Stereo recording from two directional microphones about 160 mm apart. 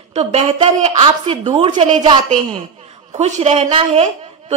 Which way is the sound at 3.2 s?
40° right (ahead or behind).